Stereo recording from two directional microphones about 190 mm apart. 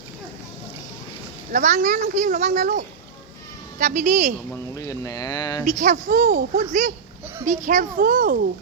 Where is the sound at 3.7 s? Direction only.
40° right (ahead or behind).